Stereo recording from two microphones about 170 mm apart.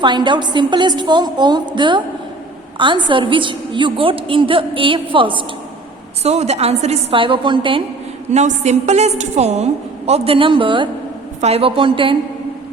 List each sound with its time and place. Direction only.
0.0 s a woman's voice: 25° right (ahead or behind)
8.3 s a woman's voice: 40° right (ahead or behind)